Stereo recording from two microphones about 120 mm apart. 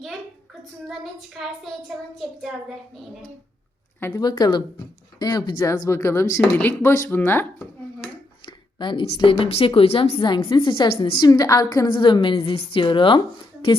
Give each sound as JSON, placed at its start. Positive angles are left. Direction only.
{"t": 0.9, "sound": "child singing", "side_deg": 0}
{"t": 4.1, "sound": "speech", "side_deg": 35}
{"t": 5.6, "sound": "speech", "side_deg": 25}
{"t": 8.4, "sound": "a woman's voice", "side_deg": 45}
{"t": 9.4, "sound": "a woman's voice", "side_deg": 55}
{"t": 11.3, "sound": "speech", "side_deg": 30}
{"t": 11.9, "sound": "a woman's voice", "side_deg": 40}